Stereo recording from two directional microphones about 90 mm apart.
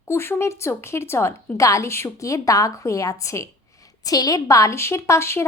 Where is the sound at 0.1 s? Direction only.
30° left (ahead or behind).